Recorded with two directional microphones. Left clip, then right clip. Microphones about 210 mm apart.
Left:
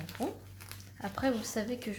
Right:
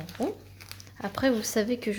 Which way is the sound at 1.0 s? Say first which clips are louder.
Right 6 dB; 45° right (ahead or behind).